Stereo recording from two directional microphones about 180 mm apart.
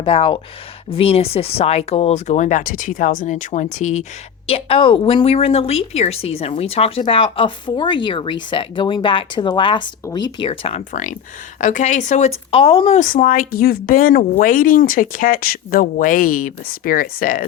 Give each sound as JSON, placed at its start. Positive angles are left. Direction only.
{"t": 0.0, "sound": "a woman's voice", "side_deg": 30}
{"t": 11.6, "sound": "speech", "side_deg": 45}
{"t": 13.0, "sound": "speech", "side_deg": 45}